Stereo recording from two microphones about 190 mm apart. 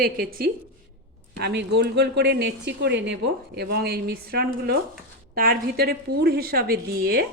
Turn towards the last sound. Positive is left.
turn(degrees=-55)  # may be behind; listen again after turning